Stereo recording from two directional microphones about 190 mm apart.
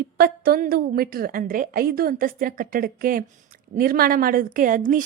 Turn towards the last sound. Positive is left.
turn(degrees=-45)  # may be behind; listen again after turning